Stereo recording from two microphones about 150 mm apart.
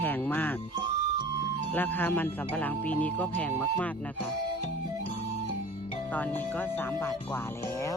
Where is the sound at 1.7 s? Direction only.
10° left (ahead or behind).